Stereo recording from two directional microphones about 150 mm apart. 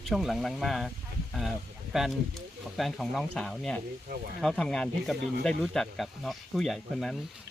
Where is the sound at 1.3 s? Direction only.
Centre (ahead or behind).